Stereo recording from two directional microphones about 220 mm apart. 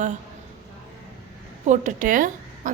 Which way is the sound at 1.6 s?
35° right (ahead or behind).